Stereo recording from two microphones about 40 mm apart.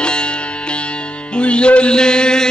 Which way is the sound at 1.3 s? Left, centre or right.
Left.